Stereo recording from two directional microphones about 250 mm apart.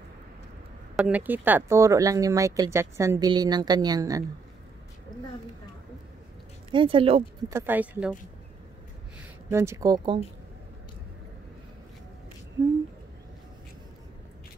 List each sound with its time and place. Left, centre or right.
0.9 s speech: centre
6.7 s speech: right
7.5 s speech: centre
9.5 s speech: centre